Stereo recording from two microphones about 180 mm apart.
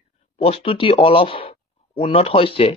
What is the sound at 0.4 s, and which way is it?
Speech, 30° left (ahead or behind).